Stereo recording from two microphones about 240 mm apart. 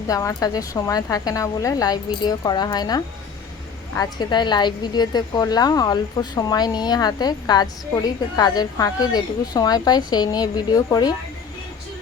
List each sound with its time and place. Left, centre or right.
0.1 s a woman's voice: centre